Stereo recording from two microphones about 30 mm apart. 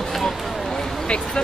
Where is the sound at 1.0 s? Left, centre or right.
Left.